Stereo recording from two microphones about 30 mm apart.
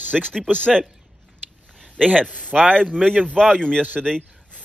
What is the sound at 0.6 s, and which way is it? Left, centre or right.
Speech, left.